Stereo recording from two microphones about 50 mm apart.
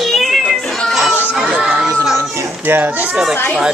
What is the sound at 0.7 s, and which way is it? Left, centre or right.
Cat, centre.